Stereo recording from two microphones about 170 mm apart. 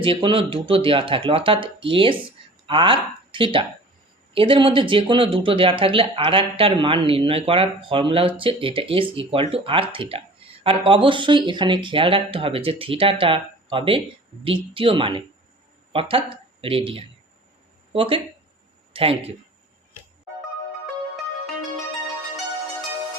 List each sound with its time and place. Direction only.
0.0 s speech: 30° right (ahead or behind)